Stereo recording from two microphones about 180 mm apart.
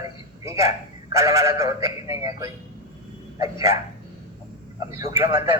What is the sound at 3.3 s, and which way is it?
Speech, 15° right (ahead or behind).